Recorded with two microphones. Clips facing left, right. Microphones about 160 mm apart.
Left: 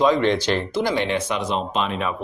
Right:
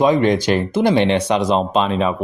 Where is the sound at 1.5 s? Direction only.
35° right (ahead or behind).